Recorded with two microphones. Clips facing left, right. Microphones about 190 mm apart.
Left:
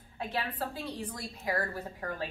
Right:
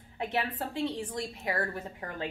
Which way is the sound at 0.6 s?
25° right (ahead or behind).